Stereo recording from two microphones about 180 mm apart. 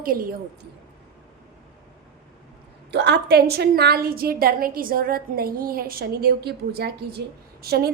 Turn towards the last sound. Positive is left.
turn(degrees=-60)  # may be behind; listen again after turning